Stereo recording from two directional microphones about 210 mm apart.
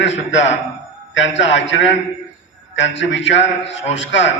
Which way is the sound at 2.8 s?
60° left (ahead or behind).